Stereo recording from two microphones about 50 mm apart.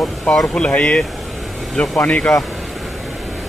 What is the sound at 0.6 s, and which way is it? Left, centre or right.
Speech, left.